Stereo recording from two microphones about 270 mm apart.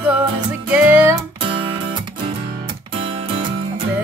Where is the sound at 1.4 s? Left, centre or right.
Centre.